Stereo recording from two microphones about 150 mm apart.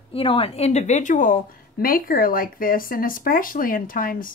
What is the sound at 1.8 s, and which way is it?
Speech, 75° left (ahead or behind).